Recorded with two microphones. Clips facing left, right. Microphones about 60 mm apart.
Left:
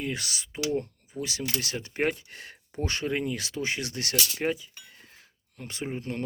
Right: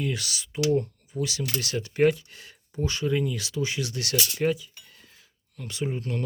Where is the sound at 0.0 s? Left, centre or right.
Left.